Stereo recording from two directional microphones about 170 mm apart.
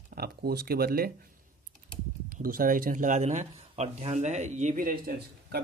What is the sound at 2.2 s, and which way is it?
Speech, 55° right (ahead or behind).